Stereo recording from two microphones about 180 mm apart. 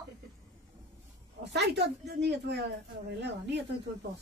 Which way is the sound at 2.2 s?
70° right (ahead or behind).